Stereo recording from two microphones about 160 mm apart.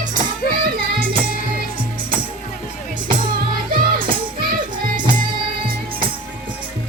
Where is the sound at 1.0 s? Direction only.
60° right (ahead or behind).